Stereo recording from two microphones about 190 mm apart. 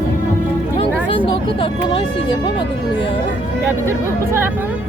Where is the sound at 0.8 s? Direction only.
30° left (ahead or behind).